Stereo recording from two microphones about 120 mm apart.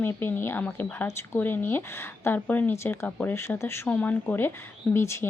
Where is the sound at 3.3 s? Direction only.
20° left (ahead or behind).